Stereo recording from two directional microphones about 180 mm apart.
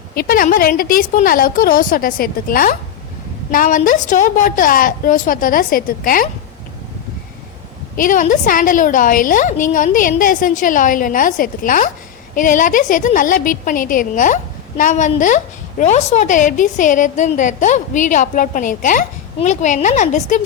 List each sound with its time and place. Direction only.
0.1 s a woman's voice: 55° left (ahead or behind)
7.9 s a woman's voice: 45° left (ahead or behind)